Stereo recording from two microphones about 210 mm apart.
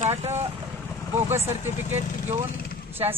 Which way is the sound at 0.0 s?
30° right (ahead or behind).